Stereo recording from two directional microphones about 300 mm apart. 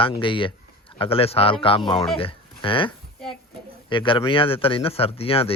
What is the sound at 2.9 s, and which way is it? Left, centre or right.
Speech, centre.